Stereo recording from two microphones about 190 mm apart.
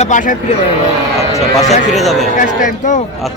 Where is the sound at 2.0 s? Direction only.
Centre (ahead or behind).